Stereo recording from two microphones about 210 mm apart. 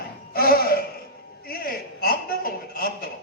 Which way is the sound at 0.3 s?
45° left (ahead or behind).